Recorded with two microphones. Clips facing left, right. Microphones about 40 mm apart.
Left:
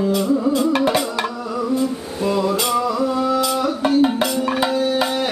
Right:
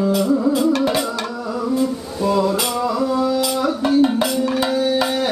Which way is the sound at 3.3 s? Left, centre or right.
Centre.